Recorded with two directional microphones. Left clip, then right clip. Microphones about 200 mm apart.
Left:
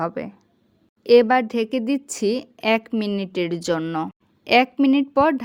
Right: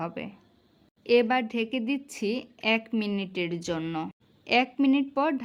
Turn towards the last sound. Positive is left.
turn(degrees=30)  # may be behind; listen again after turning